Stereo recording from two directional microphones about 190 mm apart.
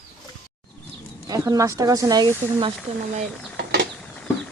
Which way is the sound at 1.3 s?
20° right (ahead or behind).